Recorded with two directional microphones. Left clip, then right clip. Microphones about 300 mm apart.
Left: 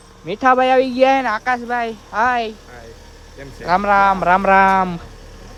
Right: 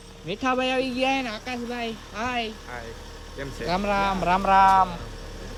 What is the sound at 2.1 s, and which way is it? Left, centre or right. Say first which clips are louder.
Speech: left 12 dB; left.